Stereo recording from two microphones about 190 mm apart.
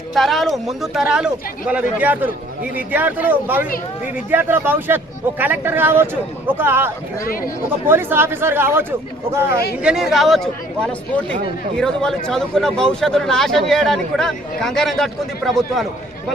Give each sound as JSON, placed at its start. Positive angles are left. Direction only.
{"t": 0.1, "sound": "speech", "side_deg": 0}
{"t": 7.2, "sound": "speech", "side_deg": 50}
{"t": 7.9, "sound": "speech", "side_deg": -10}
{"t": 9.8, "sound": "speech", "side_deg": 0}